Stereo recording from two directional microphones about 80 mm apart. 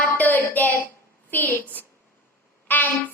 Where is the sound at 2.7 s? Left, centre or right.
Left.